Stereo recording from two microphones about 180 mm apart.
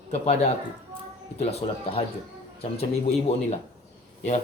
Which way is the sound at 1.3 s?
35° left (ahead or behind).